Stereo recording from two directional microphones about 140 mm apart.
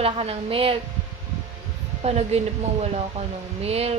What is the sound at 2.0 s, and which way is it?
A woman's voice, 50° right (ahead or behind).